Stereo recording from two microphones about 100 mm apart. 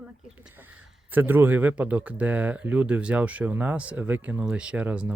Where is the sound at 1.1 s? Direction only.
20° right (ahead or behind).